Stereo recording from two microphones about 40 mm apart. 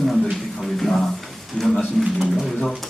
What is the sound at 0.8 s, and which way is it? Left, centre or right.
A man's voice, centre.